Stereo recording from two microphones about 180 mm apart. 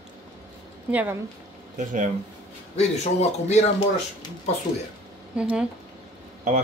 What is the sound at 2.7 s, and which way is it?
Speech, 40° left (ahead or behind).